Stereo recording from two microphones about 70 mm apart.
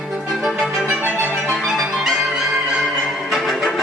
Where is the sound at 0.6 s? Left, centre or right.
Centre.